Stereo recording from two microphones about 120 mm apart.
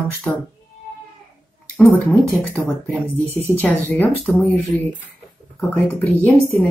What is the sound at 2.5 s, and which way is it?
A woman's voice, 5° left (ahead or behind).